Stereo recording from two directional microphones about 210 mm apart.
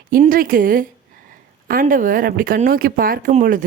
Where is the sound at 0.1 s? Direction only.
40° right (ahead or behind).